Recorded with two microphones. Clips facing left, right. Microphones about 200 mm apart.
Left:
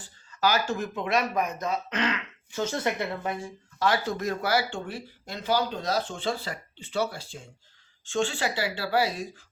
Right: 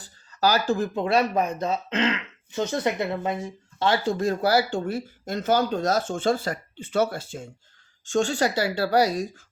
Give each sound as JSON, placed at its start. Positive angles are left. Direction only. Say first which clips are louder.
{"t": 0.0, "sound": "a woman's voice", "louder": "right 3 dB", "side_deg": -35}